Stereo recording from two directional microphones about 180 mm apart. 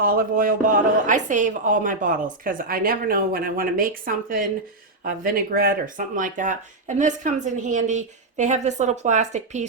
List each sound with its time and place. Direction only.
0.0 s speech: 50° right (ahead or behind)